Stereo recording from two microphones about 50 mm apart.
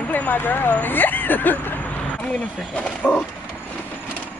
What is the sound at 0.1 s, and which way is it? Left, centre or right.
Speech, left.